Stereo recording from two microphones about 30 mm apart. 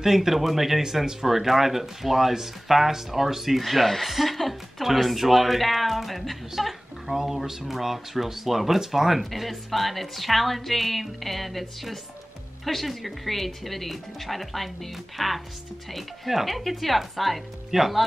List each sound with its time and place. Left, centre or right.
0.0 s a woman's voice: centre